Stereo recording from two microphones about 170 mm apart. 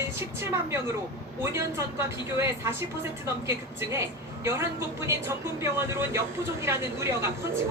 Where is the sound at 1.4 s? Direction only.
15° right (ahead or behind).